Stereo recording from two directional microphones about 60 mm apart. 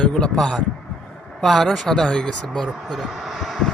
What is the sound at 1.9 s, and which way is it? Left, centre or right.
Speech, centre.